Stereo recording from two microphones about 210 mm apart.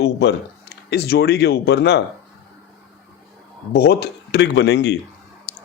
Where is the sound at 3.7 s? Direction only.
50° left (ahead or behind).